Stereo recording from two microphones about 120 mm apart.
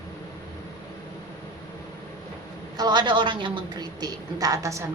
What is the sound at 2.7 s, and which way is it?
A woman's voice, 35° right (ahead or behind).